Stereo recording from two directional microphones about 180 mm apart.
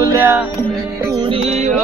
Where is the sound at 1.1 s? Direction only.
35° right (ahead or behind).